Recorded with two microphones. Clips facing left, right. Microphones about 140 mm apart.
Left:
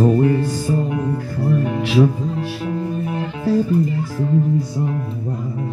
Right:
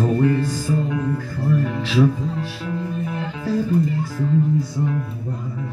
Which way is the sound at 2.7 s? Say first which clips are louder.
Left 2 dB; 35° left (ahead or behind).